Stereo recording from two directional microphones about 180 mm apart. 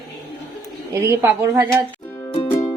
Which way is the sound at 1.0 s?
15° right (ahead or behind).